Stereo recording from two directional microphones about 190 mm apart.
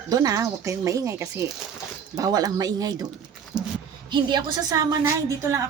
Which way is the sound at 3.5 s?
20° right (ahead or behind).